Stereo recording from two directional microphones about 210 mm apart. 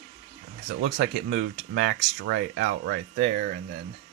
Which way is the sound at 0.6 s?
60° right (ahead or behind).